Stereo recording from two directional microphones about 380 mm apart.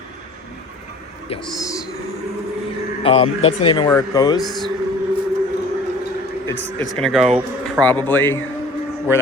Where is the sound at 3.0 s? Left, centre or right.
Centre.